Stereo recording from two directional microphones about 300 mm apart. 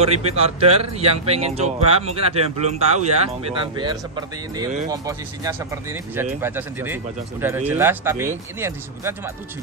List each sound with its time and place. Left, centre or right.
0.0 s speech: right